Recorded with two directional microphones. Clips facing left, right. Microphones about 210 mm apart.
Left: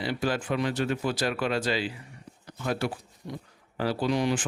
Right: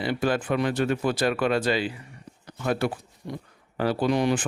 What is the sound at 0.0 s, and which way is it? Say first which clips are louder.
Speech: right 4 dB; 55° right (ahead or behind).